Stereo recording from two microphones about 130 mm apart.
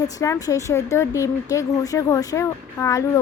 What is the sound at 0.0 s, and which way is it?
A woman's voice, 25° left (ahead or behind).